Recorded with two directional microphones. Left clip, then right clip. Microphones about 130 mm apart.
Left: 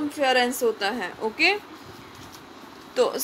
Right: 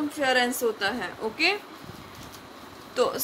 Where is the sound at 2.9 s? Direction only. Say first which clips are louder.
Left 2 dB; 20° left (ahead or behind).